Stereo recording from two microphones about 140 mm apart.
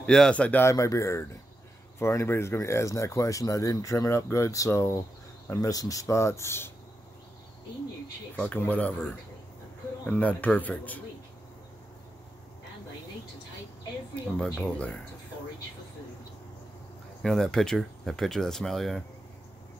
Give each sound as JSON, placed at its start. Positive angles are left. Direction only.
{"t": 0.0, "sound": "speech", "side_deg": 5}
{"t": 8.4, "sound": "speech", "side_deg": 10}
{"t": 10.1, "sound": "speech", "side_deg": 10}
{"t": 14.4, "sound": "speech", "side_deg": 10}
{"t": 17.2, "sound": "speech", "side_deg": 5}